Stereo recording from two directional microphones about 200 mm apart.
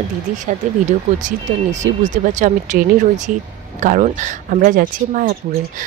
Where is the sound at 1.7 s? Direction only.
35° right (ahead or behind).